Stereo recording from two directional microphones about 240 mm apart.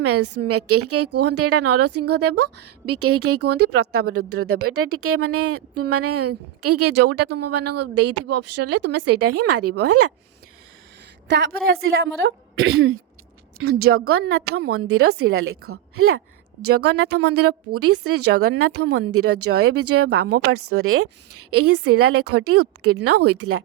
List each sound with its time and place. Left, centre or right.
0.0 s a woman's voice: right
11.3 s a woman's voice: right
12.2 s a woman's voice: right